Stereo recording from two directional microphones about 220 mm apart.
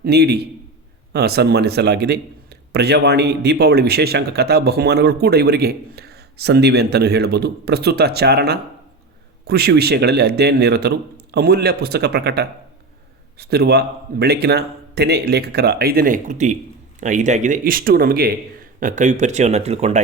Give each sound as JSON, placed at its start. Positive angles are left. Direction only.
{"t": 0.0, "sound": "a man's voice", "side_deg": -50}